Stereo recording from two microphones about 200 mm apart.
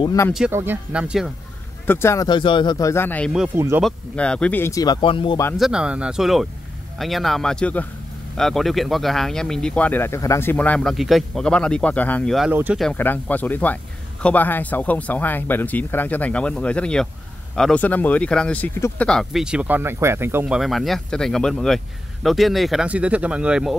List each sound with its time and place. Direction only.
0.0 s speech: 15° left (ahead or behind)
0.3 s speech: 5° right (ahead or behind)
1.9 s speech: 10° left (ahead or behind)
3.5 s speech: 15° right (ahead or behind)
3.8 s speech: 5° left (ahead or behind); by 5.4 s 25° left (ahead or behind)
5.6 s speech: 5° right (ahead or behind)